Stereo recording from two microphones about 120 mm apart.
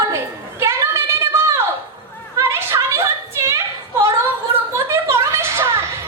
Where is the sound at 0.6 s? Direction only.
20° right (ahead or behind).